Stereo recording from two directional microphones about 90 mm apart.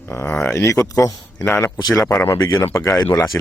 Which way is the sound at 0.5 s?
35° left (ahead or behind).